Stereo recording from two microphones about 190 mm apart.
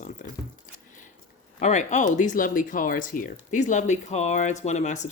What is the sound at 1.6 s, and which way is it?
Speech, 40° left (ahead or behind).